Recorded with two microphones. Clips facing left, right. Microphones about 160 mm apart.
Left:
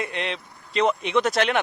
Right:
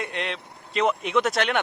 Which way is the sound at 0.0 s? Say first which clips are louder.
Left 2 dB; centre (ahead or behind).